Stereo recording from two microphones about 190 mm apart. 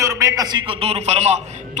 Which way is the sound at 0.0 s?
15° right (ahead or behind).